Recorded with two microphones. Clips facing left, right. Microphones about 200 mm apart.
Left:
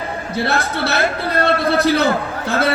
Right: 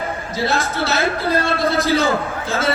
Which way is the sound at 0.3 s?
60° left (ahead or behind).